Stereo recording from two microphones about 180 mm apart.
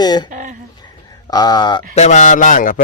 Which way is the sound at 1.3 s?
20° left (ahead or behind).